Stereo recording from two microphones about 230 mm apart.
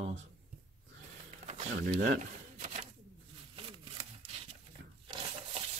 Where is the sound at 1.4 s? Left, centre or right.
Right.